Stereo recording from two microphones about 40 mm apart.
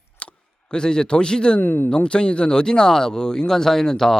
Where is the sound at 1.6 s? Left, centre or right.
Left.